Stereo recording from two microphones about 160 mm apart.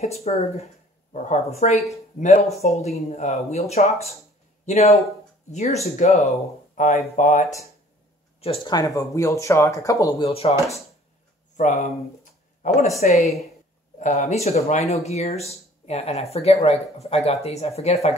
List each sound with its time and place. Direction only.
0.0 s speech: 40° left (ahead or behind)
2.6 s speech: 40° left (ahead or behind)
8.4 s speech: 35° left (ahead or behind)
8.7 s speech: 20° left (ahead or behind)
10.2 s speech: 40° left (ahead or behind)
11.5 s speech: 50° left (ahead or behind)
13.9 s speech: 50° left (ahead or behind)